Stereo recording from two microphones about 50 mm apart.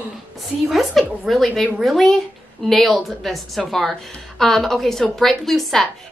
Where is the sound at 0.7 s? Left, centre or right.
Centre.